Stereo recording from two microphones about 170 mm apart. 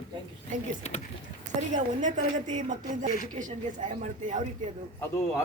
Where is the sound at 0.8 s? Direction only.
40° left (ahead or behind).